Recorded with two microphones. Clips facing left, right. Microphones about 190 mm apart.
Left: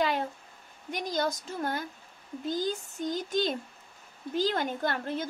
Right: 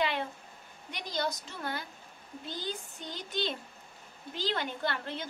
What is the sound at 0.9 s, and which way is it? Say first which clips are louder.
Speech: left 4 dB; 45° left (ahead or behind).